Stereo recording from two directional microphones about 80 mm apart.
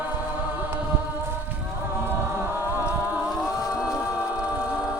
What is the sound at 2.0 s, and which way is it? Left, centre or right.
A capella, right.